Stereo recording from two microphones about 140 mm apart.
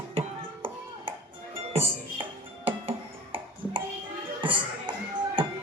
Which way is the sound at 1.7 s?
40° right (ahead or behind).